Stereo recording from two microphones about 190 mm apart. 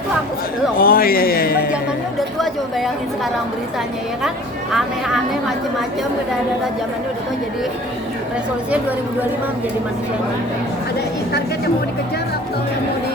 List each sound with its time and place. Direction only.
0.8 s a man's voice: 50° left (ahead or behind)
2.4 s speech: centre (ahead or behind)
4.7 s speech: centre (ahead or behind)